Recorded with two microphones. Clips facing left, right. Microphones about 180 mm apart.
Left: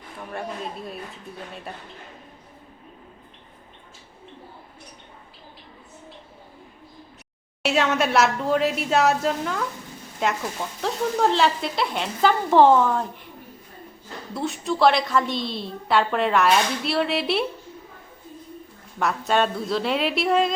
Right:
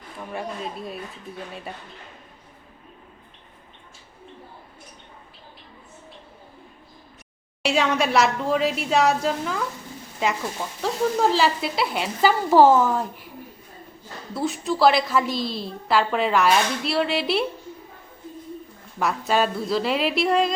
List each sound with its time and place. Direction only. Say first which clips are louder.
0.2 s speech: right 1 dB; centre (ahead or behind)
7.6 s a woman's voice: even; centre (ahead or behind)
14.3 s a woman's voice: right 1 dB; centre (ahead or behind)
18.9 s a woman's voice: even; centre (ahead or behind)